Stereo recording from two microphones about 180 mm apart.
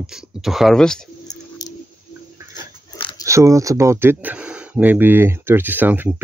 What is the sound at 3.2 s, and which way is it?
Speech, 15° right (ahead or behind).